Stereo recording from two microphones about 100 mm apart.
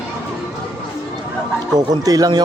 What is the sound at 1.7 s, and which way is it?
Speech, 40° right (ahead or behind).